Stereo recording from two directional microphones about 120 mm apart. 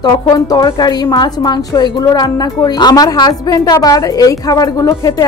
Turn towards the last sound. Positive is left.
turn(degrees=30)  # may be behind; listen again after turning